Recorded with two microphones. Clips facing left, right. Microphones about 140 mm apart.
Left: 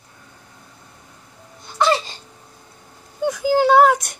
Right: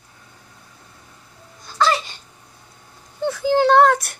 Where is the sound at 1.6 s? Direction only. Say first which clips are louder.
Left 1 dB; 25° left (ahead or behind).